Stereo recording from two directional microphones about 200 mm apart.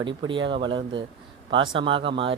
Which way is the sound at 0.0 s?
25° right (ahead or behind).